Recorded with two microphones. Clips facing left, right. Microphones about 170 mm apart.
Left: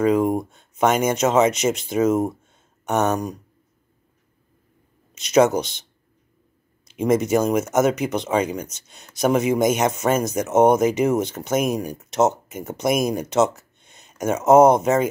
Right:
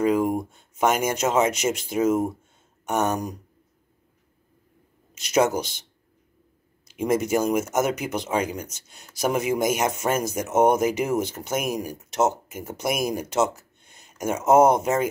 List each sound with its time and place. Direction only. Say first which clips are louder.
0.5 s speech: left 3 dB; 5° right (ahead or behind)
2.0 s speech: left 2 dB; 25° left (ahead or behind)
2.8 s speech: left 3 dB; 10° right (ahead or behind)
5.1 s speech: left 5 dB; 10° right (ahead or behind)
6.9 s speech: left 4 dB; 10° right (ahead or behind)
14.0 s a sound: left 4 dB; 10° right (ahead or behind)
14.5 s speech: left 4 dB; 10° right (ahead or behind)